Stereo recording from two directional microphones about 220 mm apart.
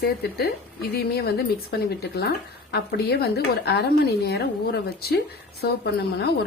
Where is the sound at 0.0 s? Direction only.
45° left (ahead or behind).